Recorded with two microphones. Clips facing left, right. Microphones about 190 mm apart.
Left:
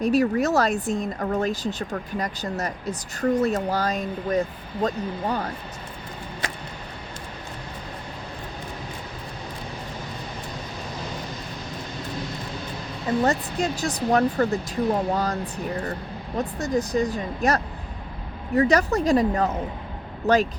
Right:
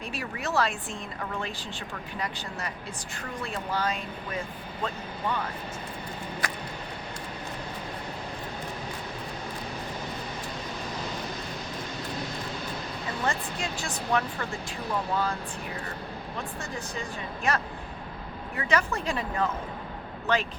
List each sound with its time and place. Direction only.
0.0 s speech: 40° left (ahead or behind)
13.2 s speech: 40° left (ahead or behind)
16.4 s speech: 40° left (ahead or behind)